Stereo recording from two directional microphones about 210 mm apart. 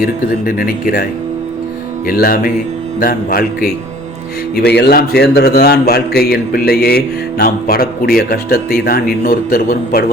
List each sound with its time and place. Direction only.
0.0 s a man's voice: 45° left (ahead or behind)
2.0 s a man's voice: 45° left (ahead or behind)